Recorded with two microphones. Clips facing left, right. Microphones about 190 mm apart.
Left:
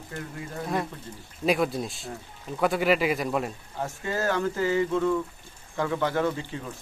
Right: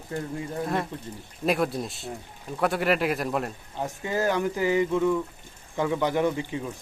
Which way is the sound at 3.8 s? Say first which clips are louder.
Right 2 dB; 15° right (ahead or behind).